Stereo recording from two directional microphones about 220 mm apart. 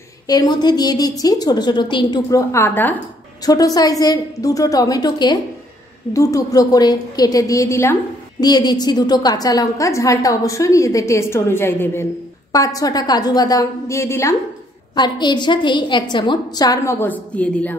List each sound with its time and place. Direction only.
0.3 s a woman's voice: 20° left (ahead or behind)